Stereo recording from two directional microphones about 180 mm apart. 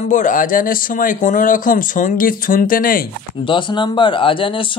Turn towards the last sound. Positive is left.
turn(degrees=30)  # may be behind; listen again after turning